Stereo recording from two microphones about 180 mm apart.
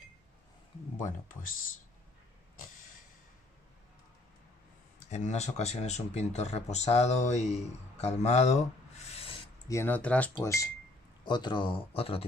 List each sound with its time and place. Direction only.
5.1 s speech: 40° left (ahead or behind)
9.7 s speech: 15° left (ahead or behind); by 12.3 s 30° left (ahead or behind)